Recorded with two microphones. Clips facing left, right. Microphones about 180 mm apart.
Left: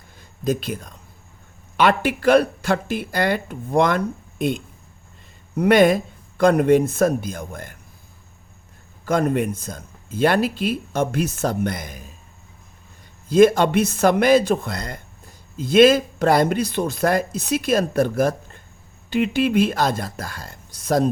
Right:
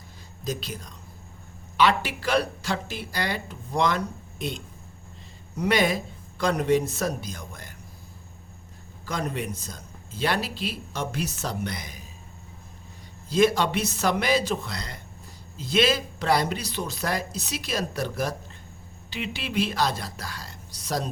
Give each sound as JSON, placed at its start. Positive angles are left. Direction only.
{"t": 0.4, "sound": "speech", "side_deg": 55}
{"t": 9.0, "sound": "speech", "side_deg": 55}
{"t": 13.2, "sound": "speech", "side_deg": 50}